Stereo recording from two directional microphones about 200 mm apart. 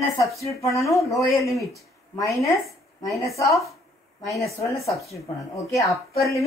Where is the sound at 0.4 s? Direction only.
15° left (ahead or behind).